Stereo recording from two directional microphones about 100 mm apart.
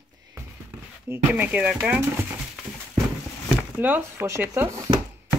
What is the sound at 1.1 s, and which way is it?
Speech, 15° right (ahead or behind).